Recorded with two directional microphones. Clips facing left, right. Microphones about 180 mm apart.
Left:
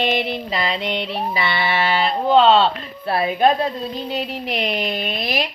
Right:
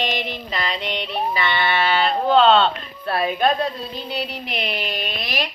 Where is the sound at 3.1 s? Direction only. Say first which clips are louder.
Left 3 dB; 20° left (ahead or behind).